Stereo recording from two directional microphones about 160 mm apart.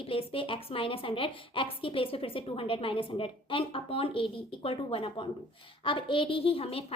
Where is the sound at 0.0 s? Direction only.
35° left (ahead or behind).